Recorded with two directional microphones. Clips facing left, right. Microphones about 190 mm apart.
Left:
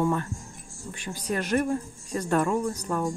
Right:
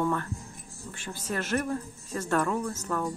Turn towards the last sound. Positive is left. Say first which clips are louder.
# left 3 dB
turn(degrees=15)  # may be behind; listen again after turning